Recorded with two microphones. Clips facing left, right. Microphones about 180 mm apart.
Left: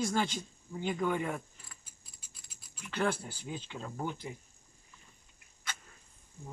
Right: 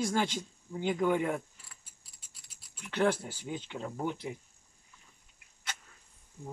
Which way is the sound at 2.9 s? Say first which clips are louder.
Right 4 dB; 15° right (ahead or behind).